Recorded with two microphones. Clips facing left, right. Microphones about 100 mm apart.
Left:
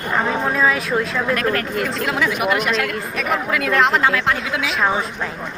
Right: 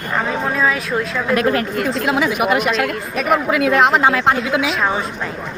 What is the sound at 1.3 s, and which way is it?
A woman's voice, 20° right (ahead or behind).